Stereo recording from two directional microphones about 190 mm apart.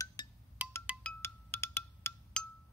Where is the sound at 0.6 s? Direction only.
5° right (ahead or behind).